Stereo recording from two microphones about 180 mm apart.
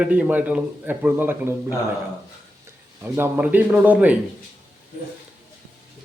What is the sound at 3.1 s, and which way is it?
A man's voice, 15° right (ahead or behind).